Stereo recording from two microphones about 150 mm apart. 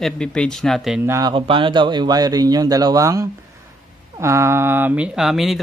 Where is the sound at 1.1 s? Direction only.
25° right (ahead or behind).